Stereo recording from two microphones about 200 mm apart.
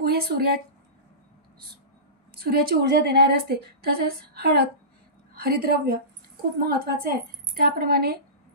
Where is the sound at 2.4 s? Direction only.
50° right (ahead or behind).